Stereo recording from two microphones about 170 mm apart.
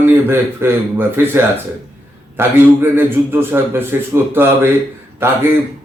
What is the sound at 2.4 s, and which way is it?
A man's voice, 15° right (ahead or behind).